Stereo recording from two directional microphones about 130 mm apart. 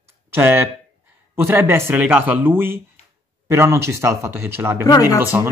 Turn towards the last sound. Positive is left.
turn(degrees=-15)  # may be behind; listen again after turning